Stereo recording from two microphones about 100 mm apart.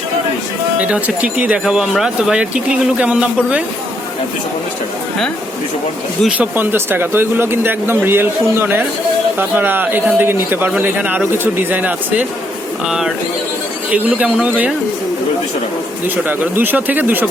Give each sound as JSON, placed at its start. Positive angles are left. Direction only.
{"t": 0.8, "sound": "speech", "side_deg": -15}
{"t": 6.2, "sound": "speech", "side_deg": -15}
{"t": 12.9, "sound": "speech", "side_deg": -5}
{"t": 16.6, "sound": "speech", "side_deg": -15}